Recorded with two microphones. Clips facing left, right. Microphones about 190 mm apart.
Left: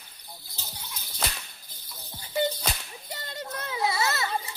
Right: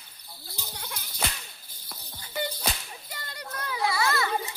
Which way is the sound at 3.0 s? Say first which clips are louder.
Left 6 dB; 25° left (ahead or behind).